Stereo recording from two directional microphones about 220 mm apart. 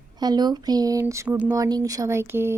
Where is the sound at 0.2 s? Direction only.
20° right (ahead or behind).